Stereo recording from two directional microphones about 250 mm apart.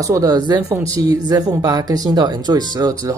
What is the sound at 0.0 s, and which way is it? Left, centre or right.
Speech, centre.